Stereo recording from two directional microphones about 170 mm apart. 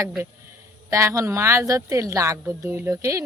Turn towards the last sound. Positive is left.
turn(degrees=-15)  # may be behind; listen again after turning